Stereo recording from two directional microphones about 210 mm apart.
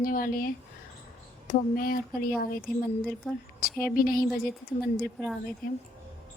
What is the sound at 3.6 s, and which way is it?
Speech, 45° left (ahead or behind).